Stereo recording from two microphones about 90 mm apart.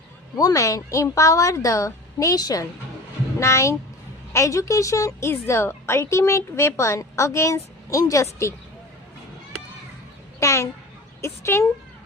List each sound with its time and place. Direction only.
0.3 s a woman's voice: 40° left (ahead or behind)
10.4 s a woman's voice: 35° left (ahead or behind)